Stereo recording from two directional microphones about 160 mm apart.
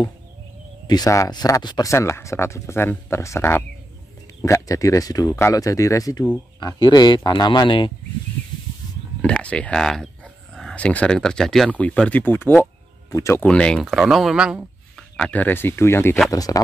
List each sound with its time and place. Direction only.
0.8 s speech: 25° left (ahead or behind)
9.2 s speech: 5° left (ahead or behind)
13.5 s speech: 5° left (ahead or behind); by 16.6 s 20° left (ahead or behind)